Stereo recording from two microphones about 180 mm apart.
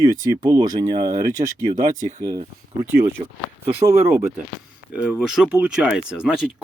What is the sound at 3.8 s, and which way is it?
Speech, 15° right (ahead or behind).